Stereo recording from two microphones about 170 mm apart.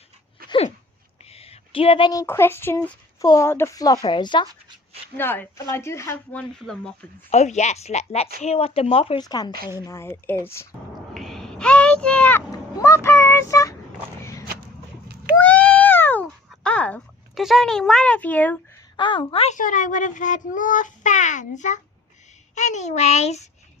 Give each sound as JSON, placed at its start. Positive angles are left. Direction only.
{"t": 1.2, "sound": "a sound", "side_deg": 35}
{"t": 2.2, "sound": "a woman's voice", "side_deg": 15}
{"t": 5.1, "sound": "speech", "side_deg": 10}
{"t": 6.6, "sound": "speech", "side_deg": 5}
{"t": 7.3, "sound": "speech", "side_deg": 40}
{"t": 9.2, "sound": "a woman's voice", "side_deg": 20}
{"t": 11.1, "sound": "a sound", "side_deg": 0}
{"t": 12.5, "sound": "vehicle", "side_deg": 20}
{"t": 14.2, "sound": "a sound", "side_deg": 15}
{"t": 18.9, "sound": "a woman's voice", "side_deg": 30}
{"t": 19.5, "sound": "a child's voice", "side_deg": 50}